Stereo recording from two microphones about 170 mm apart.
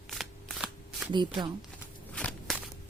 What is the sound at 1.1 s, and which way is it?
Speech, 25° right (ahead or behind).